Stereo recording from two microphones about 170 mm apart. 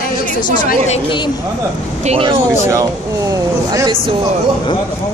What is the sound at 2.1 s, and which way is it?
Speech, 30° right (ahead or behind).